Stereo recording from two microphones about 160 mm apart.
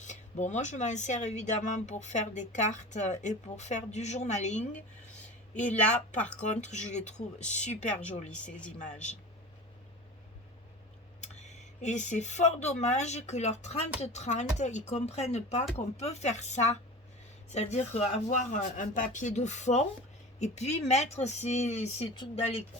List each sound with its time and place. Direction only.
0.0 s speech: 50° left (ahead or behind)
5.8 s speech: 10° left (ahead or behind)
6.6 s speech: 45° left (ahead or behind)
11.2 s speech: 45° left (ahead or behind)